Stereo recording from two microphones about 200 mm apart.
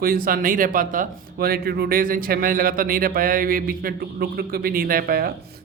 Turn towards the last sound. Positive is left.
turn(degrees=-50)  # may be behind; listen again after turning